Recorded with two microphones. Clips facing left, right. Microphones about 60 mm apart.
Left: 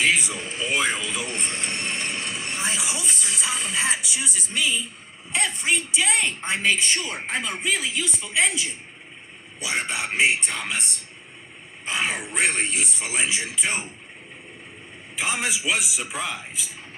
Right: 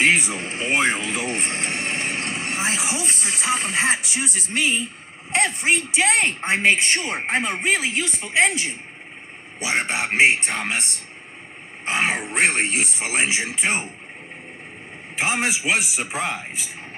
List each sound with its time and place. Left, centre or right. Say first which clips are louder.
0.0 s a man's voice: right 3 dB; right
5.9 s a man's voice: right 4 dB; right
11.9 s speech: right 4 dB; right
15.1 s speech: right 4 dB; right